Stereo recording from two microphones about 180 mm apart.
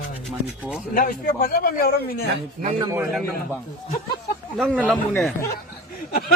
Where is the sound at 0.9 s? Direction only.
50° left (ahead or behind).